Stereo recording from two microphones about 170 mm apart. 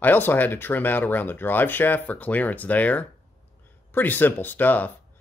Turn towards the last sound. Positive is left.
turn(degrees=10)  # may be behind; listen again after turning